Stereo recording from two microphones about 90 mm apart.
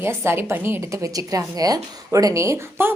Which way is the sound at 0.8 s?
35° right (ahead or behind).